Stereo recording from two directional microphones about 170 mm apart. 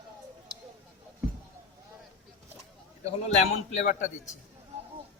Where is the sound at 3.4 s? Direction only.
45° left (ahead or behind).